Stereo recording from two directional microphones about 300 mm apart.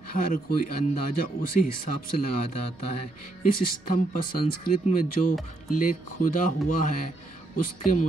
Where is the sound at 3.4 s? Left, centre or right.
Left.